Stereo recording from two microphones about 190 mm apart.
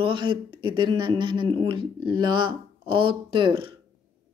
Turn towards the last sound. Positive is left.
turn(degrees=-25)  # may be behind; listen again after turning